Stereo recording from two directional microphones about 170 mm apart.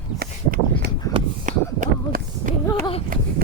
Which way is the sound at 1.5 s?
50° right (ahead or behind).